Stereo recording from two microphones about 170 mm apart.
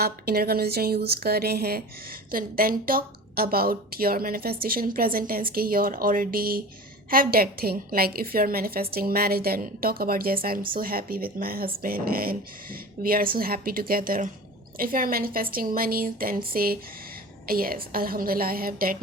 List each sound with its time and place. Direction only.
0.0 s a woman's voice: 65° right (ahead or behind)